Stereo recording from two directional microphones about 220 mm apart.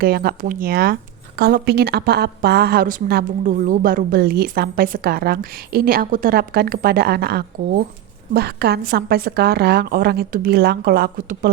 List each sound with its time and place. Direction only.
0.0 s a woman's voice: 45° right (ahead or behind)